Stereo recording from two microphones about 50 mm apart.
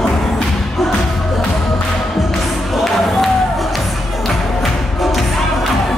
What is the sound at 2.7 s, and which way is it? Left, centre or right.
Music, centre.